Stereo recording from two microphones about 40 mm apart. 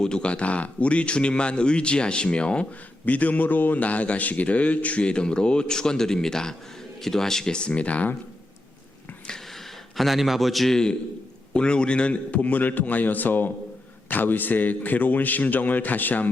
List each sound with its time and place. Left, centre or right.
0.0 s a man's voice: left
3.1 s a man's voice: left
3.8 s a man's voice: left
5.0 s a man's voice: left
10.0 s a man's voice: centre
10.7 s a man's voice: centre; by 16.3 s left